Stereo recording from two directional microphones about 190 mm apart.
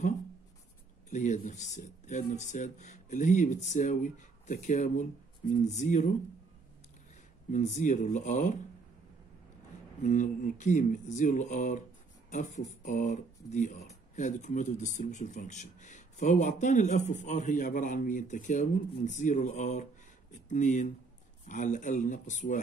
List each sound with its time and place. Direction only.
1.1 s speech: 40° left (ahead or behind)
7.5 s speech: 40° left (ahead or behind)
10.0 s speech: 40° left (ahead or behind)